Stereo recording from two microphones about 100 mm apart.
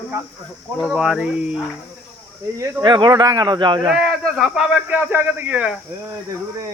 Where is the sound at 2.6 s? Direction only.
45° right (ahead or behind).